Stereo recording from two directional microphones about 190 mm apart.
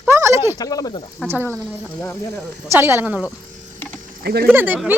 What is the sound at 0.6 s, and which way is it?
Speech, 20° left (ahead or behind).